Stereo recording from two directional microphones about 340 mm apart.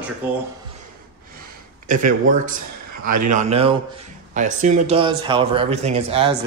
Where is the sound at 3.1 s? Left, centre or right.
Right.